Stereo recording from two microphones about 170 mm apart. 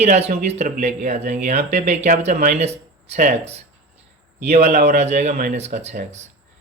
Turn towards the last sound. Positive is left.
turn(degrees=-40)  # may be behind; listen again after turning